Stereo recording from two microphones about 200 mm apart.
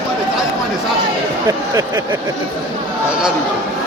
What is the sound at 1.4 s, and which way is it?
Speech, 15° right (ahead or behind).